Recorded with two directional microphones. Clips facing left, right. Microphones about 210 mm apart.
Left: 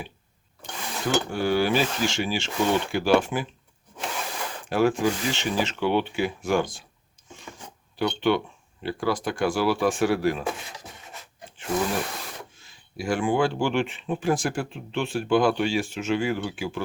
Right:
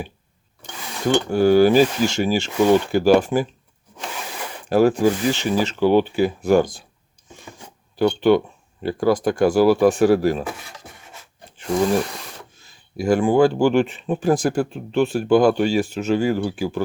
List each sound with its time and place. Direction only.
1.3 s speech: 40° right (ahead or behind)
4.7 s speech: 40° right (ahead or behind)
7.9 s speech: 40° right (ahead or behind)
12.6 s speech: 40° right (ahead or behind)